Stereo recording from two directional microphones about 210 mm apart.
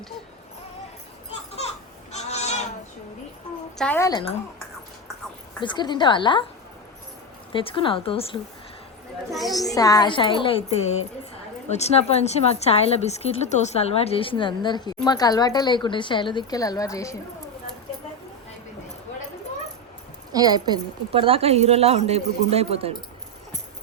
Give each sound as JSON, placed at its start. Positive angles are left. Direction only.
{"t": 2.1, "sound": "a sound", "side_deg": 30}
{"t": 3.8, "sound": "speech", "side_deg": 10}
{"t": 5.6, "sound": "a woman's voice", "side_deg": 20}
{"t": 7.5, "sound": "a woman's voice", "side_deg": 25}
{"t": 9.7, "sound": "a woman's voice", "side_deg": 15}
{"t": 20.3, "sound": "a woman's voice", "side_deg": -20}